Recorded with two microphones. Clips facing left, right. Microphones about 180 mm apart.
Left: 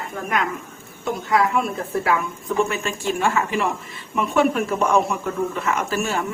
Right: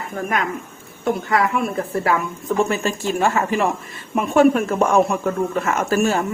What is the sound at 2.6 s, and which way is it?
Speech, 35° right (ahead or behind).